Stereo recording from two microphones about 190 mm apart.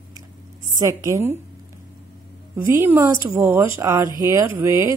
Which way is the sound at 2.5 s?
10° right (ahead or behind).